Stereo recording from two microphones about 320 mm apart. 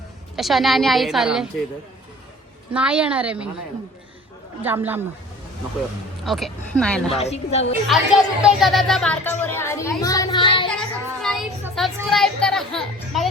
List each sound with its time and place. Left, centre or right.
0.3 s a woman's voice: centre
2.7 s a woman's voice: centre
4.6 s a woman's voice: centre
6.2 s a woman's voice: centre
7.1 s a woman's voice: centre
7.9 s speech: centre
10.7 s a child's voice: centre